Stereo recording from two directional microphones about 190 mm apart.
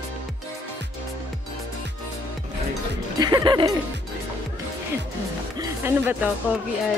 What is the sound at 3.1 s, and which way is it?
Music, 20° right (ahead or behind).